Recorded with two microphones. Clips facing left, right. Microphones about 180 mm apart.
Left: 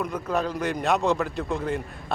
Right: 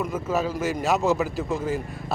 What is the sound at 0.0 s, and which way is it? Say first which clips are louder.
A man's voice: right 1 dB; 5° right (ahead or behind).